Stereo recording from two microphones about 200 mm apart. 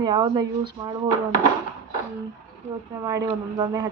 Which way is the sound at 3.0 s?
15° right (ahead or behind).